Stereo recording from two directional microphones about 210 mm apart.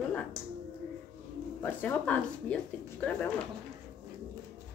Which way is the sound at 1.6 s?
5° left (ahead or behind).